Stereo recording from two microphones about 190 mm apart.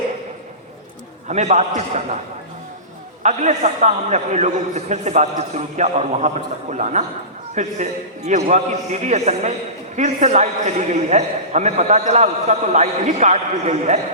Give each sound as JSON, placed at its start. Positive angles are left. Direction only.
{"t": 1.3, "sound": "a man's voice", "side_deg": -40}
{"t": 3.2, "sound": "a man's voice", "side_deg": -40}